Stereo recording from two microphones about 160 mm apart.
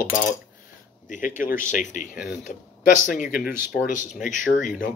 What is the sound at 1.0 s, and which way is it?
Speech, 55° left (ahead or behind).